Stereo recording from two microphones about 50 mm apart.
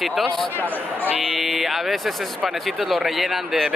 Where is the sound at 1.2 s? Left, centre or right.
Centre.